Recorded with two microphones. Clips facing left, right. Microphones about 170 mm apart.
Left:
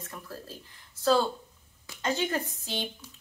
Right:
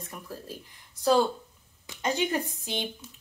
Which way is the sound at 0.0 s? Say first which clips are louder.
Right 1 dB; 15° right (ahead or behind).